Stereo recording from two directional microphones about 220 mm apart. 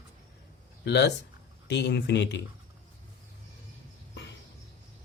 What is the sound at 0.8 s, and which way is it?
Speech, 50° left (ahead or behind).